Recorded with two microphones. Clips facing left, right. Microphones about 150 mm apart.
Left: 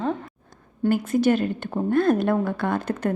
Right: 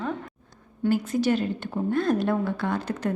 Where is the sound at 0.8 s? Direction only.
55° left (ahead or behind).